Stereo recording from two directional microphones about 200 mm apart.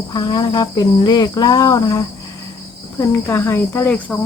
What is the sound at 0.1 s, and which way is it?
Cricket, 20° left (ahead or behind).